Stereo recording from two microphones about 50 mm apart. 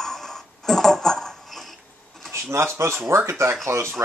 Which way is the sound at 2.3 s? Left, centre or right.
Right.